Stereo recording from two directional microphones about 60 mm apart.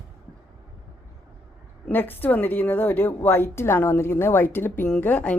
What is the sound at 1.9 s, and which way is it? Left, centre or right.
A woman's voice, left.